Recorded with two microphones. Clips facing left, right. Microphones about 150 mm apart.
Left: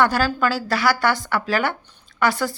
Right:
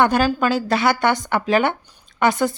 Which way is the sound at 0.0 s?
20° right (ahead or behind).